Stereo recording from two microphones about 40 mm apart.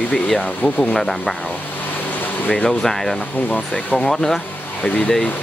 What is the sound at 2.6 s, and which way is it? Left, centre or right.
Speech, centre.